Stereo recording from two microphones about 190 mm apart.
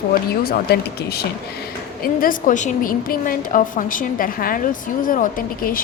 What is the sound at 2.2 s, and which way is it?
A woman's voice, 45° left (ahead or behind).